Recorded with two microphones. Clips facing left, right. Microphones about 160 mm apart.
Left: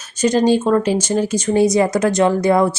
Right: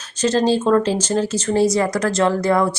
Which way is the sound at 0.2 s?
15° left (ahead or behind).